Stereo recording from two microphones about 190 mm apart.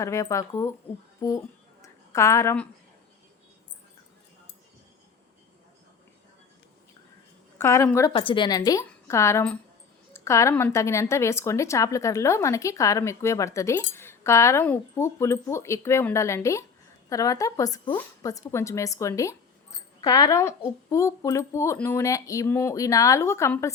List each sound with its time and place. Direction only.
0.0 s a woman's voice: 15° left (ahead or behind)
1.8 s a sound: 15° left (ahead or behind)
7.6 s a woman's voice: 15° left (ahead or behind)
8.1 s a woman's voice: 25° left (ahead or behind)